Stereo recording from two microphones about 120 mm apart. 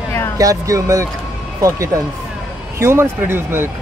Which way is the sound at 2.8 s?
20° right (ahead or behind).